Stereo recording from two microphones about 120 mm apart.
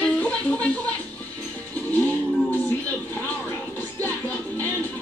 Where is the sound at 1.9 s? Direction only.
15° left (ahead or behind).